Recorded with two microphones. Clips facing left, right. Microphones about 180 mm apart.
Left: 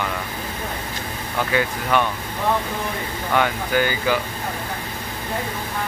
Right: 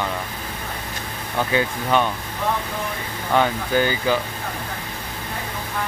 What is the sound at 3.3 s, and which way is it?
Speech, 20° right (ahead or behind).